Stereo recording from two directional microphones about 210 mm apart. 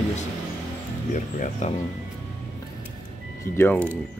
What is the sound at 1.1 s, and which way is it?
Speech, 35° left (ahead or behind).